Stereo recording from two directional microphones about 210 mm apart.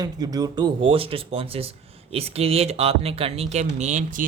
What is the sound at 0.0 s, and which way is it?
Speech, 20° right (ahead or behind).